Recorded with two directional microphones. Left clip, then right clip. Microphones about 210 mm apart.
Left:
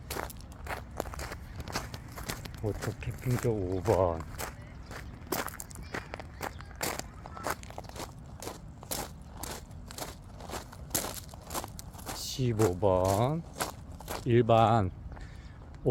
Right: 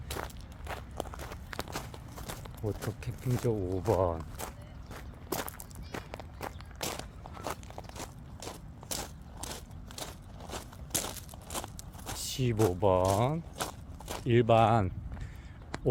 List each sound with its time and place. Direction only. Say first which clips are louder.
0.7 s walk: left 2 dB; 5° left (ahead or behind)
2.2 s speech: left 2 dB; 5° right (ahead or behind)
3.8 s walk: left 2 dB; 5° right (ahead or behind)
9.9 s a sound: left 1 dB; 5° right (ahead or behind)
10.5 s walk: left 1 dB; centre (ahead or behind)
13.1 s speech: even; centre (ahead or behind)